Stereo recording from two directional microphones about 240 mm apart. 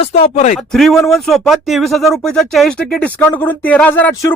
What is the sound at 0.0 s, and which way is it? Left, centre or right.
Speech, left.